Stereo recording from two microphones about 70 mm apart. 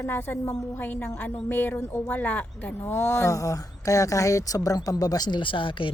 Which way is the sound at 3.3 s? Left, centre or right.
Left.